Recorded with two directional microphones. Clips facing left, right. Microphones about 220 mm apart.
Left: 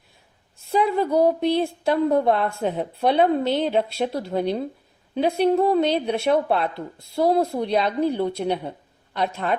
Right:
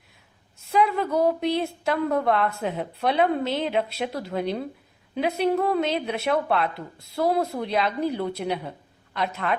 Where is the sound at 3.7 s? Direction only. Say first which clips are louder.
Left 3 dB; 30° left (ahead or behind).